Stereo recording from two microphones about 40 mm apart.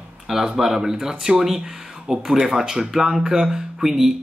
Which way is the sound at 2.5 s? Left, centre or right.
Centre.